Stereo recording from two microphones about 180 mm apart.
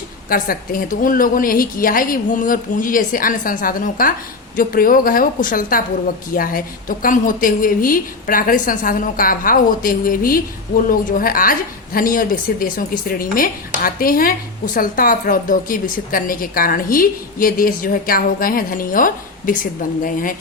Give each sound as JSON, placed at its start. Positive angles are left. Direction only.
{"t": 0.3, "sound": "speech", "side_deg": 55}